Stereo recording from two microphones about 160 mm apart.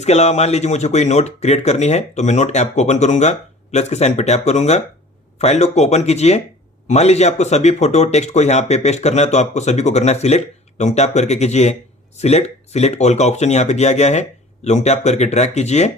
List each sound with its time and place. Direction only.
0.0 s speech: 45° left (ahead or behind)